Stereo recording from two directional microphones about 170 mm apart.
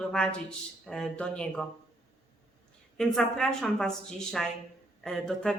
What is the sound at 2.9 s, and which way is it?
Speech, 5° left (ahead or behind).